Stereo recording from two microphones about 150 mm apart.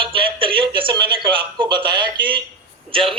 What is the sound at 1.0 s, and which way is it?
A man's voice, 35° right (ahead or behind).